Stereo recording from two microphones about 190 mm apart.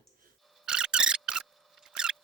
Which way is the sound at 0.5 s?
5° right (ahead or behind).